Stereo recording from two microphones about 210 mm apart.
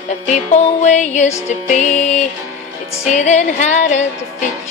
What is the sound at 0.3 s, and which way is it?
Music, 35° left (ahead or behind).